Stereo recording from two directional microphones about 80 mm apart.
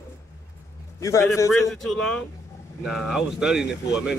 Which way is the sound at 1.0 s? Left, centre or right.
Left.